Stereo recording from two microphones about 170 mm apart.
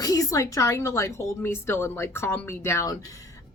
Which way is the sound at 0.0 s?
20° left (ahead or behind).